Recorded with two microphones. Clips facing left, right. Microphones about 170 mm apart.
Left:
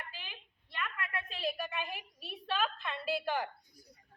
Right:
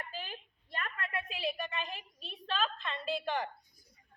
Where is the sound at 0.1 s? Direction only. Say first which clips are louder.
Right 7 dB; 45° right (ahead or behind).